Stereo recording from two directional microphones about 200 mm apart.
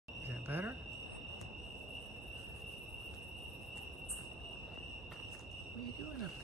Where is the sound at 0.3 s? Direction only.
10° right (ahead or behind).